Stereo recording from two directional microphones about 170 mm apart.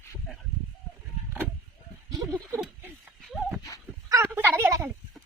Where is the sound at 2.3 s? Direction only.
10° right (ahead or behind).